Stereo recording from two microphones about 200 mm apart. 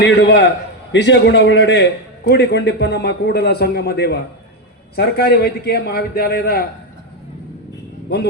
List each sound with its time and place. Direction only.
0.0 s a man's voice: 60° left (ahead or behind)